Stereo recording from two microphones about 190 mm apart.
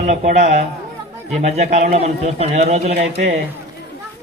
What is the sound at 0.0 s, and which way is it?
A man's voice, 35° right (ahead or behind).